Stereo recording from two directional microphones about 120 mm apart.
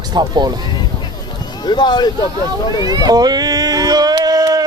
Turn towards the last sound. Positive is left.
turn(degrees=-30)  # may be behind; listen again after turning